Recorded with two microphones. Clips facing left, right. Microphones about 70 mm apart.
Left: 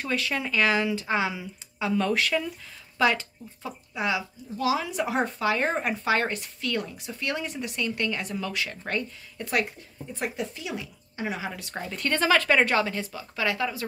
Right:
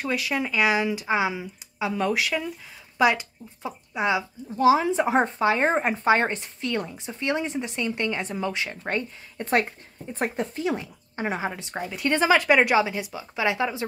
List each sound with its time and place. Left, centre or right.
0.0 s speech: centre; by 11.6 s right
11.6 s speech: centre